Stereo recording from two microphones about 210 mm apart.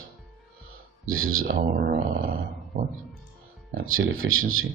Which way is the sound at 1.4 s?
45° right (ahead or behind).